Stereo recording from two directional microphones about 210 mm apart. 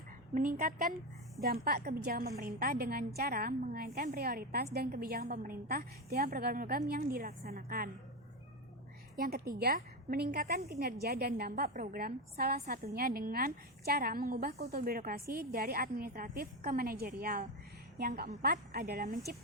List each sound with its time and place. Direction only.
0.3 s a woman's voice: 40° right (ahead or behind)
9.1 s a woman's voice: 45° right (ahead or behind)